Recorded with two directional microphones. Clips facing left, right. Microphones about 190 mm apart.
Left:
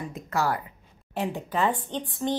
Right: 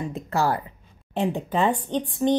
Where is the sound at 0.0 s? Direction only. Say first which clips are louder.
Right 3 dB; 30° right (ahead or behind).